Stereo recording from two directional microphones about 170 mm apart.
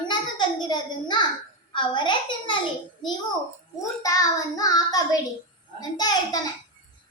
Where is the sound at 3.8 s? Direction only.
20° left (ahead or behind).